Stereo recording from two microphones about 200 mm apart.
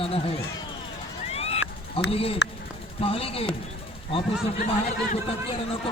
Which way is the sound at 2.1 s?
30° left (ahead or behind).